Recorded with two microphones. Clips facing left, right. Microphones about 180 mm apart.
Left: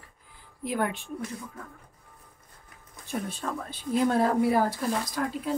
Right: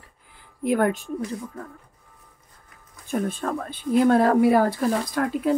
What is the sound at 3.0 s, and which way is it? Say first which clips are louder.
Speech: right 7 dB; 50° right (ahead or behind).